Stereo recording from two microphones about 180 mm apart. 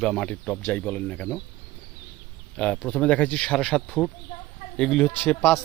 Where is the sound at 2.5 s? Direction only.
5° left (ahead or behind).